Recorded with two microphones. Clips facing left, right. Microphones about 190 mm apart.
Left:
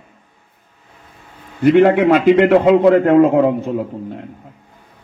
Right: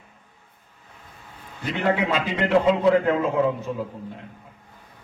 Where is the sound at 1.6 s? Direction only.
60° left (ahead or behind).